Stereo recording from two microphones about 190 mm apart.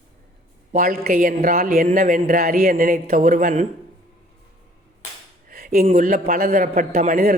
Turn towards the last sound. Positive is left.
turn(degrees=-45)  # may be behind; listen again after turning